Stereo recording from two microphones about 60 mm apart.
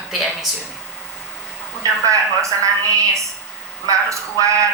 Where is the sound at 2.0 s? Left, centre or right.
Right.